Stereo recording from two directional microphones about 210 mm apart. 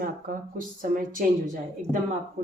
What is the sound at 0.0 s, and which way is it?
Speech, 40° right (ahead or behind).